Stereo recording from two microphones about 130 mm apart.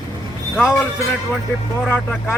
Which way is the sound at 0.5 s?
15° left (ahead or behind).